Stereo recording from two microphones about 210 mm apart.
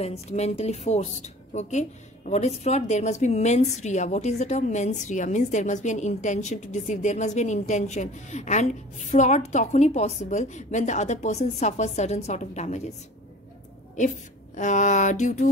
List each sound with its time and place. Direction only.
0.0 s a woman's voice: 30° left (ahead or behind)
13.9 s a woman's voice: 35° left (ahead or behind)